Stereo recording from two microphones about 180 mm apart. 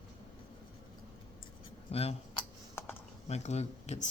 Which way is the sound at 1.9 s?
35° left (ahead or behind).